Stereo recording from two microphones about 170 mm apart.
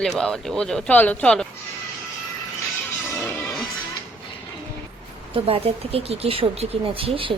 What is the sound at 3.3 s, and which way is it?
Music, 5° left (ahead or behind).